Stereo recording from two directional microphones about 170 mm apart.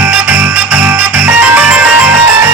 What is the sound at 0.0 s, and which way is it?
Music, 5° right (ahead or behind).